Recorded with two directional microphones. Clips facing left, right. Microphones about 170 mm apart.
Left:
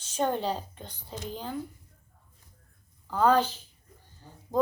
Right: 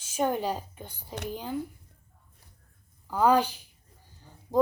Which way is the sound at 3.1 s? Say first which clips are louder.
Even; 10° right (ahead or behind).